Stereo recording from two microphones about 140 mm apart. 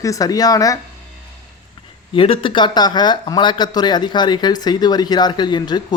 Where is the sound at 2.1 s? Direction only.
40° left (ahead or behind).